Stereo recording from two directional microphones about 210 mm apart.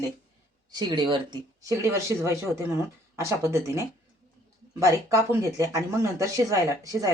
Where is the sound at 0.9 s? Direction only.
20° right (ahead or behind).